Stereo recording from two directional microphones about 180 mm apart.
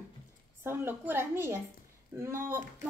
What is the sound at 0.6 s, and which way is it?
Speech, 10° right (ahead or behind).